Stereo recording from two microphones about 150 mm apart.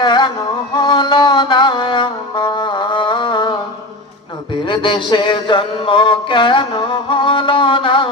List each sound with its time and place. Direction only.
0.0 s music: 30° left (ahead or behind)
4.6 s mantra: 30° left (ahead or behind)